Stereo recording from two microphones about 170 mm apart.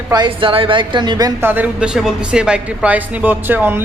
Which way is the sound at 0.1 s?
30° right (ahead or behind).